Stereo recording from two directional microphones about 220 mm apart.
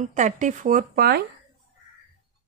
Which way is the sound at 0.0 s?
35° right (ahead or behind).